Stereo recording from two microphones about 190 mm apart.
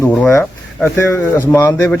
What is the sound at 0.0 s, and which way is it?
Speech, 15° left (ahead or behind).